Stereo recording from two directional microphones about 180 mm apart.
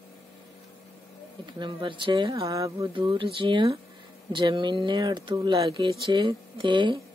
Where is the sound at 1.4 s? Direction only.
25° right (ahead or behind).